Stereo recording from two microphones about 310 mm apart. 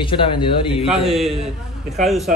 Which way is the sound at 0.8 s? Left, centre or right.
Centre.